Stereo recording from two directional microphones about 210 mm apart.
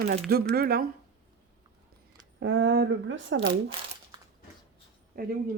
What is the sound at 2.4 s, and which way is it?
Speech, 60° right (ahead or behind).